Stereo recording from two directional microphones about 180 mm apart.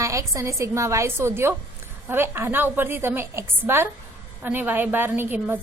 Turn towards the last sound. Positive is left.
turn(degrees=-10)  # may be behind; listen again after turning